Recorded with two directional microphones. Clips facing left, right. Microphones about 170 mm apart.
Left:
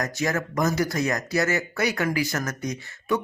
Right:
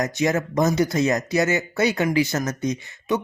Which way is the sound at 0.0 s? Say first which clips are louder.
Right 4 dB; 20° right (ahead or behind).